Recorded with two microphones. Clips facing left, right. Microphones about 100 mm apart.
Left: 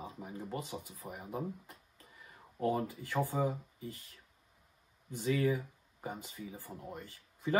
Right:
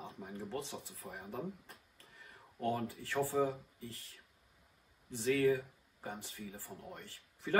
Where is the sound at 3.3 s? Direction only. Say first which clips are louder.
Right 1 dB; 15° left (ahead or behind).